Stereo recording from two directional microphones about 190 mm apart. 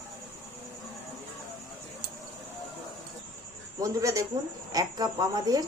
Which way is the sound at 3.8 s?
15° right (ahead or behind).